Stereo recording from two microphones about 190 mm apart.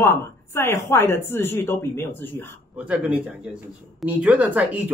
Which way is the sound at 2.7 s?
5° right (ahead or behind).